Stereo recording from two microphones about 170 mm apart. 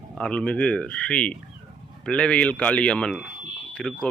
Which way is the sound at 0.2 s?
5° left (ahead or behind).